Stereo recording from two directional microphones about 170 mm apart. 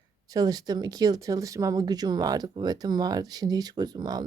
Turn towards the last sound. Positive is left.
turn(degrees=-25)  # may be behind; listen again after turning